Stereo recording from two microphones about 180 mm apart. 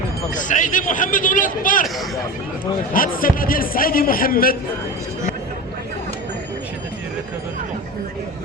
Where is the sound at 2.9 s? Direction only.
50° left (ahead or behind).